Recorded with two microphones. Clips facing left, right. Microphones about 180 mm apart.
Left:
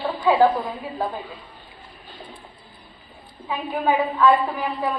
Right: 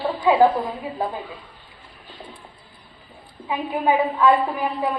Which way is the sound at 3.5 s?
15° right (ahead or behind).